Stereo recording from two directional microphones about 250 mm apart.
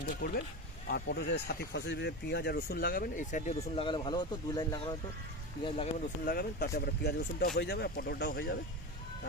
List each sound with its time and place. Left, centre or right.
0.1 s speech: left
3.6 s speech: centre
6.2 s speech: left